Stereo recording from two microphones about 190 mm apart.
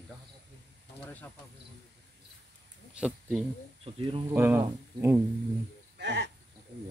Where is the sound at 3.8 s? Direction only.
30° right (ahead or behind).